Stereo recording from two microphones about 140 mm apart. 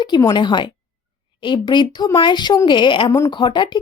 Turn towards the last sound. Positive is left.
turn(degrees=35)  # may be behind; listen again after turning